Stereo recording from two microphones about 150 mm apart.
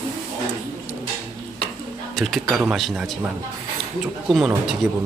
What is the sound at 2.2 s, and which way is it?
Speech, centre (ahead or behind).